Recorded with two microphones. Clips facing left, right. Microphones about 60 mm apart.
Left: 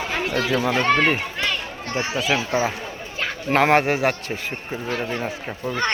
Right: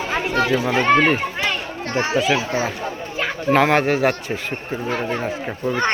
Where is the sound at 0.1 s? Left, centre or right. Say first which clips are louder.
Right 5 dB; right.